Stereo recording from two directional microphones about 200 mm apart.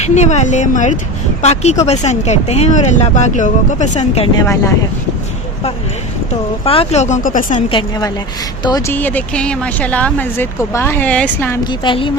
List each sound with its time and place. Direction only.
0.0 s speech: 35° left (ahead or behind)
4.4 s speech: 15° left (ahead or behind)
6.7 s speech: 30° left (ahead or behind)
7.7 s a woman's voice: 20° left (ahead or behind)
11.6 s a woman's voice: 20° left (ahead or behind)